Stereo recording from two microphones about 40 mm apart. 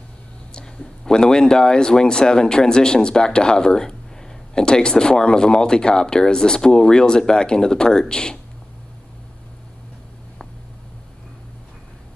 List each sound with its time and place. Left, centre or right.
0.5 s speech: centre